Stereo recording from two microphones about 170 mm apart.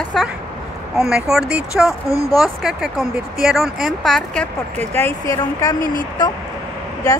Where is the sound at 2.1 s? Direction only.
20° left (ahead or behind).